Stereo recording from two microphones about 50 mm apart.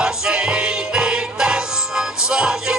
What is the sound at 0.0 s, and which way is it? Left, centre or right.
Music, centre.